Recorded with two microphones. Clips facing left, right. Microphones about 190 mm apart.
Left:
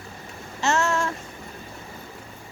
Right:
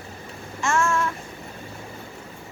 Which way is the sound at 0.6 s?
40° left (ahead or behind).